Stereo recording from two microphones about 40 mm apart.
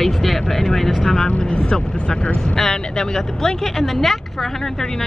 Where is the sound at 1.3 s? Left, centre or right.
Left.